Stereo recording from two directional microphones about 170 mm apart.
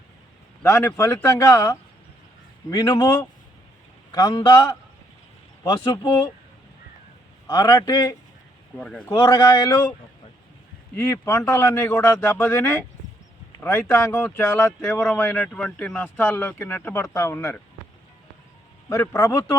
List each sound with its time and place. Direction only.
0.6 s speech: 15° left (ahead or behind)
5.6 s speech: 25° left (ahead or behind)
7.4 s speech: 20° left (ahead or behind)
8.8 s speech: 5° left (ahead or behind)
9.0 s speech: 20° left (ahead or behind)
10.9 s speech: 15° left (ahead or behind)
18.9 s speech: 15° left (ahead or behind)